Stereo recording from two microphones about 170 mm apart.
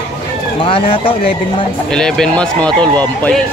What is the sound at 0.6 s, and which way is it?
Speech, 35° left (ahead or behind).